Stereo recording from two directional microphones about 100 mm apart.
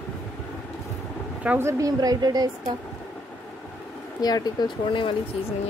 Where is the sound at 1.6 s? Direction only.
30° right (ahead or behind).